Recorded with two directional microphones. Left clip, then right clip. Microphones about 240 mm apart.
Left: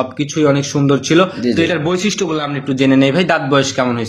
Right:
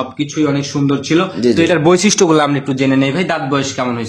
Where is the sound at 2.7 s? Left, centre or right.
Centre.